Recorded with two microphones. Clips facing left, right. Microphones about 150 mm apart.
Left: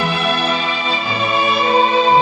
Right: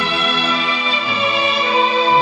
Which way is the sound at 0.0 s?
40° left (ahead or behind).